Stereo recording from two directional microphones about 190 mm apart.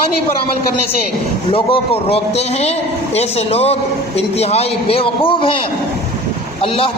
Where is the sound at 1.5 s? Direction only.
30° left (ahead or behind).